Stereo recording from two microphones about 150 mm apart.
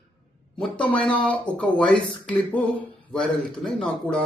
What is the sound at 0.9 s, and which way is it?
Mantra, 10° left (ahead or behind).